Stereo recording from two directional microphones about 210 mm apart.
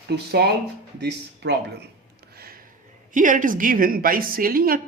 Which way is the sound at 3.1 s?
40° right (ahead or behind).